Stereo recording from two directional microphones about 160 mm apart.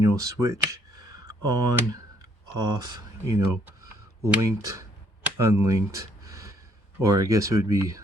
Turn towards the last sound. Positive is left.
turn(degrees=-20)  # may be behind; listen again after turning